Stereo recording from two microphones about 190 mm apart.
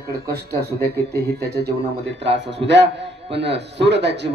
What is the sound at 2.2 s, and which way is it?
A man's voice, 65° right (ahead or behind).